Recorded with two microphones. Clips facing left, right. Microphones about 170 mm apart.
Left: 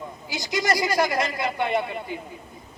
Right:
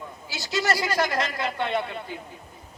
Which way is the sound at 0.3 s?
15° left (ahead or behind).